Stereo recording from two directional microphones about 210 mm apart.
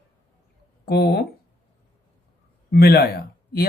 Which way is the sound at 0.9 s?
50° left (ahead or behind).